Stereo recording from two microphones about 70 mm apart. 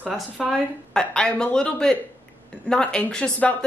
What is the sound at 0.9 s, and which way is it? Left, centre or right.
Speech, centre.